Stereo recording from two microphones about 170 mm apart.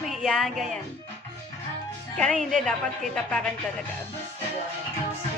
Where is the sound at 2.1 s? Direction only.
5° left (ahead or behind).